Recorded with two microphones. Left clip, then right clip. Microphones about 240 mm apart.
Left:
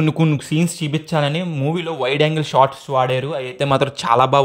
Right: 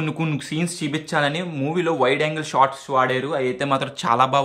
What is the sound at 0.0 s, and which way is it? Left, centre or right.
Speech, left.